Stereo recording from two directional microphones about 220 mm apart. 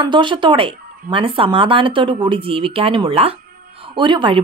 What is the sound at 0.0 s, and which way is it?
A woman's voice, 20° right (ahead or behind).